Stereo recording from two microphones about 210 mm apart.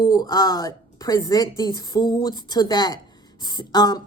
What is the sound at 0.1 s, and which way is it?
A woman's voice, 15° left (ahead or behind).